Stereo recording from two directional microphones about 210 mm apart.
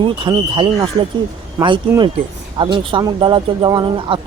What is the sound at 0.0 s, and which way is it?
Speech, 25° right (ahead or behind).